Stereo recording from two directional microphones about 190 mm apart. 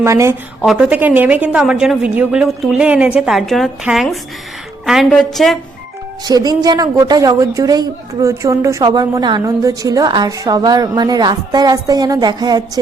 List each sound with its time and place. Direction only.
0.0 s a woman's voice: 15° right (ahead or behind)
0.6 s a woman's voice: 5° right (ahead or behind)
6.2 s a woman's voice: 20° right (ahead or behind)